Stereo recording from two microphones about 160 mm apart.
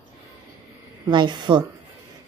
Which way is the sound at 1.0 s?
30° right (ahead or behind).